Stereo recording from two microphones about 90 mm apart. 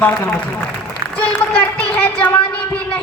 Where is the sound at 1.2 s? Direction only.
15° left (ahead or behind).